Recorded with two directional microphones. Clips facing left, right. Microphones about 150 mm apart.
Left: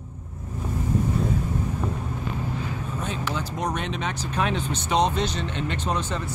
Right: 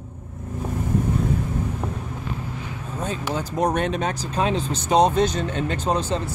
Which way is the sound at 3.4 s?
50° right (ahead or behind).